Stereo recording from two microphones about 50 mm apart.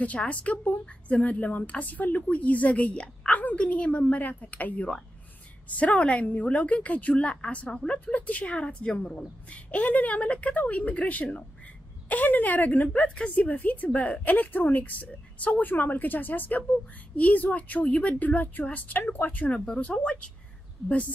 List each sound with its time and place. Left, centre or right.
0.0 s a woman's voice: left